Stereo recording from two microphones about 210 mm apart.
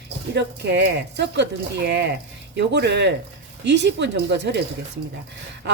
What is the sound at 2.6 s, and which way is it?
A woman's voice, 55° right (ahead or behind).